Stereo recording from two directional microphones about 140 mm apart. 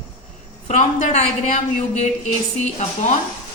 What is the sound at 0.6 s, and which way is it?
A woman's voice, 55° left (ahead or behind).